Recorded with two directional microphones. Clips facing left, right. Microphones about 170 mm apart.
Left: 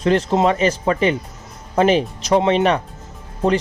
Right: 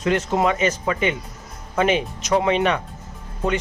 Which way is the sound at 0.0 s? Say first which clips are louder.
Left 4 dB; 30° left (ahead or behind).